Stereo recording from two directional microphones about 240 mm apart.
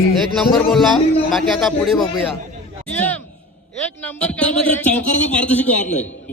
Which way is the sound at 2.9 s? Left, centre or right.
Centre.